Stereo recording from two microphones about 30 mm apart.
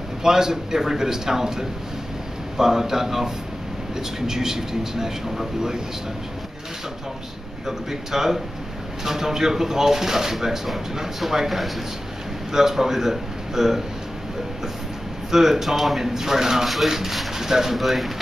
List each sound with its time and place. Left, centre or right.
0.2 s speech: centre
7.6 s speech: centre
15.3 s speech: centre
16.6 s speech: centre
17.4 s speech: centre